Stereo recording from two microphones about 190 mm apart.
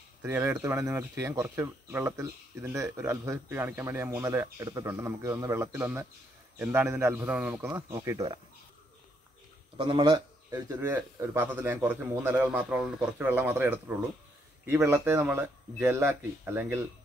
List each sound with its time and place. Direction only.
0.2 s speech: 10° right (ahead or behind)
9.8 s speech: 25° right (ahead or behind)